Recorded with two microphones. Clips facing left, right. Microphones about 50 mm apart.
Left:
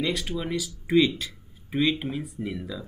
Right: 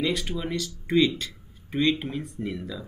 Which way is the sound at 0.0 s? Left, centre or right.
Centre.